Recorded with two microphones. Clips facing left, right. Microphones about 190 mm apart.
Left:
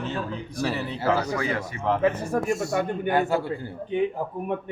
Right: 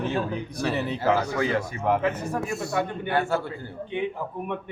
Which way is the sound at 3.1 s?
15° left (ahead or behind).